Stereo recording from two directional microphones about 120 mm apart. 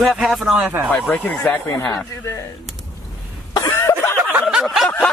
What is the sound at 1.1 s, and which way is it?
Speech, 10° left (ahead or behind).